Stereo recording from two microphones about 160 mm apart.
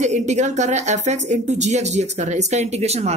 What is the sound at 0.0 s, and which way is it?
Speech, 50° right (ahead or behind).